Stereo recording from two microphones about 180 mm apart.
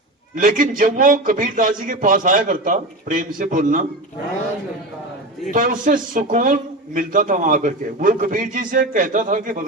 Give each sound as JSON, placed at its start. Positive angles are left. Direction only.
{"t": 0.3, "sound": "a man's voice", "side_deg": -50}
{"t": 5.5, "sound": "a man's voice", "side_deg": -45}